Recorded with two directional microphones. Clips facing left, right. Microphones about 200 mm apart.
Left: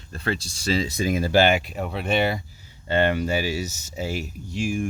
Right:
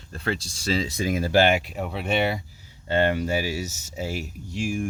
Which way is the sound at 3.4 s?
85° left.